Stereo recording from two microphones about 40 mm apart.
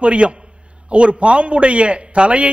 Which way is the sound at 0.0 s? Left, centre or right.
Right.